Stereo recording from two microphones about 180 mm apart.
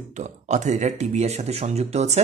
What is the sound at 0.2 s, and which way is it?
Speech, 40° right (ahead or behind).